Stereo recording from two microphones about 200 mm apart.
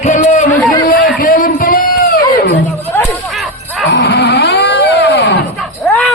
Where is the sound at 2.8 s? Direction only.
10° left (ahead or behind).